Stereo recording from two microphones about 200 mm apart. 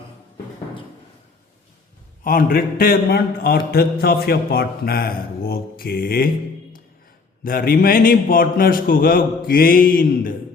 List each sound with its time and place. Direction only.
2.2 s a man's voice: 45° left (ahead or behind)
7.4 s a man's voice: 45° left (ahead or behind)